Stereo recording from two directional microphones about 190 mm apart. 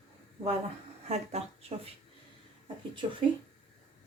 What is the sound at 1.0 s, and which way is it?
Speech, 35° right (ahead or behind).